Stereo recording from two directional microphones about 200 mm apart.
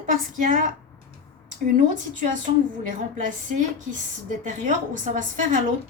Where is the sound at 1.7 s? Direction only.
40° right (ahead or behind).